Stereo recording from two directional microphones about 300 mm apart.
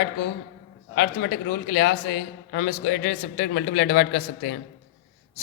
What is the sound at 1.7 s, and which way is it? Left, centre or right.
A man's voice, left.